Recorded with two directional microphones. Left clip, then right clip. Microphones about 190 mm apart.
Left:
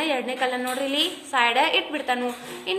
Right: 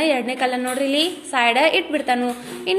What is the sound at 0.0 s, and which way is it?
A woman's voice, 20° right (ahead or behind).